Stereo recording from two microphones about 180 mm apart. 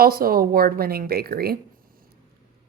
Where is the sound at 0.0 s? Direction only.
55° right (ahead or behind).